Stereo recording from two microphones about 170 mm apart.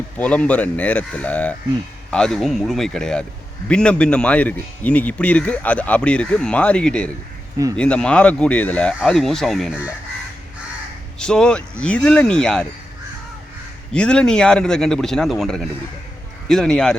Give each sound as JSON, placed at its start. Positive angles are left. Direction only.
{"t": 0.2, "sound": "a man's voice", "side_deg": 10}
{"t": 11.2, "sound": "a man's voice", "side_deg": 5}
{"t": 13.9, "sound": "a man's voice", "side_deg": 5}